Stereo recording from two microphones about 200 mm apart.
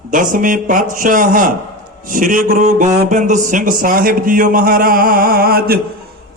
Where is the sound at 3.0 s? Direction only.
40° right (ahead or behind).